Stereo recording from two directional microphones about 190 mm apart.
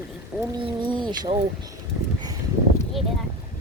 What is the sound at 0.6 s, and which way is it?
Speech, 25° right (ahead or behind).